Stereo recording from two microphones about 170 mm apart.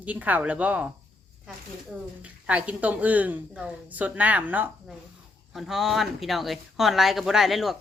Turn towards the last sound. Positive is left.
turn(degrees=0)  # may be behind; listen again after turning